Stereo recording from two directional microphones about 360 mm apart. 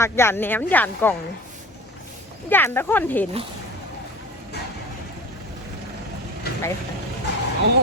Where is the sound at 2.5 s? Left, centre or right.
Centre.